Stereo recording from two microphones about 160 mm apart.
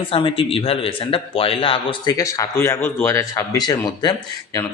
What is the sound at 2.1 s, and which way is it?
Speech, 20° left (ahead or behind).